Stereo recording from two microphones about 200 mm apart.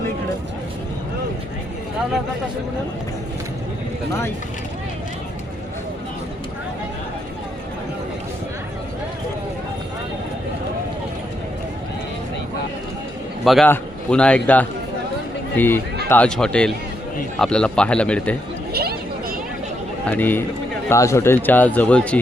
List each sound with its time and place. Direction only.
13.4 s a man's voice: centre (ahead or behind)
18.7 s chatter: 50° right (ahead or behind)
20.1 s a man's voice: 10° left (ahead or behind)